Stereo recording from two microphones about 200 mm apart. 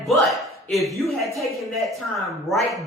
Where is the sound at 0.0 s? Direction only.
Centre (ahead or behind).